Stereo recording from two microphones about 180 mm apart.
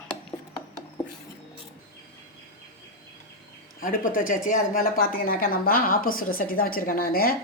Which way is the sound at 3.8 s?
50° left (ahead or behind).